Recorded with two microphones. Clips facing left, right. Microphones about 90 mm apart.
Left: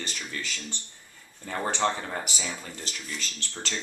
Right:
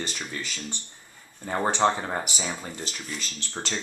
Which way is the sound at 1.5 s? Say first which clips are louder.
Right 4 dB; 30° right (ahead or behind).